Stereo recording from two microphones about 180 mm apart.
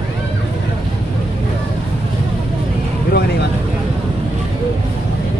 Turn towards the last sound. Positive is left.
turn(degrees=65)  # may be behind; listen again after turning